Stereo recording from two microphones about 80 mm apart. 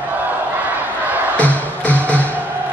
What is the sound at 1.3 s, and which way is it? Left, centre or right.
Music, centre.